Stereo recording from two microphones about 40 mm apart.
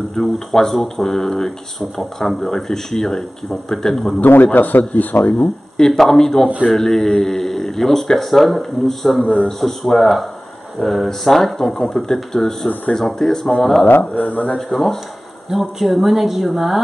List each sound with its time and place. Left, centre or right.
0.1 s speech: centre
4.2 s speech: left
5.8 s speech: centre
9.2 s speech: left
9.5 s speech: centre
14.1 s speech: left
14.7 s speech: centre